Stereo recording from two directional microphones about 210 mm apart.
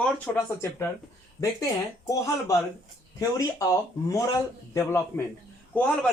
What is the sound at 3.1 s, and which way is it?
Speech, 15° left (ahead or behind).